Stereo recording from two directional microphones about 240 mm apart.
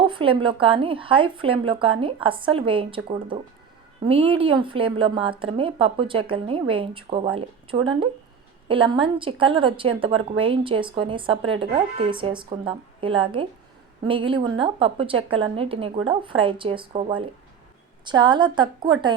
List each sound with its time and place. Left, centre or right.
0.0 s a woman's voice: right